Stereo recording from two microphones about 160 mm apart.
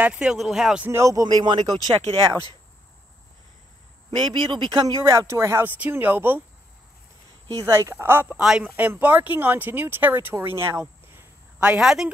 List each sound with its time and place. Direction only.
0.0 s speech: 5° right (ahead or behind); by 2.0 s 25° right (ahead or behind)
4.3 s speech: 30° right (ahead or behind); by 6.4 s 10° right (ahead or behind)
7.6 s speech: 15° right (ahead or behind)